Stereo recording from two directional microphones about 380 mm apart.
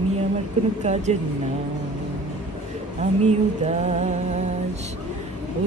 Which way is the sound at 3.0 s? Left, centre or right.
Centre.